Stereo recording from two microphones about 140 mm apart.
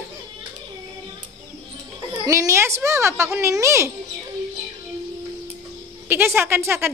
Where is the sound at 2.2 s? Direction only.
20° right (ahead or behind).